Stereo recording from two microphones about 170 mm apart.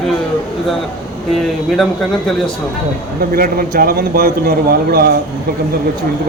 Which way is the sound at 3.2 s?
60° right (ahead or behind).